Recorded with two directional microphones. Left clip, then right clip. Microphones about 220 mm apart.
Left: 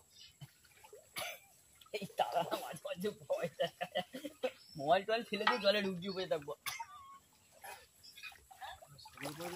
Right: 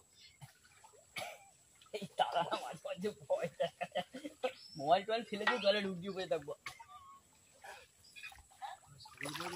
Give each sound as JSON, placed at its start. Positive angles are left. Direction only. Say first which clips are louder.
{"t": 1.1, "sound": "cough", "louder": "left 1 dB", "side_deg": 50}
{"t": 1.9, "sound": "a sound", "louder": "right 1 dB", "side_deg": 45}
{"t": 5.6, "sound": "speech", "louder": "even", "side_deg": 40}